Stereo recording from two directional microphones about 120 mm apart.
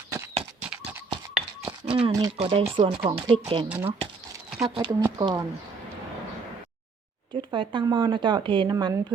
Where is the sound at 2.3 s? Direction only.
55° right (ahead or behind).